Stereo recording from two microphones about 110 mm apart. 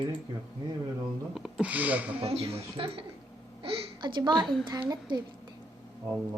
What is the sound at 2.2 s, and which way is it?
Speech, 60° right (ahead or behind).